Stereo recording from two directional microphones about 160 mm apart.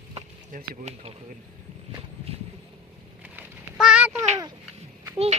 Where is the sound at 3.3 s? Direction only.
5° right (ahead or behind).